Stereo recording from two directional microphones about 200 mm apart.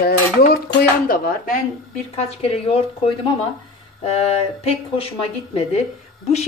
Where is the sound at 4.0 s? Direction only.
30° left (ahead or behind).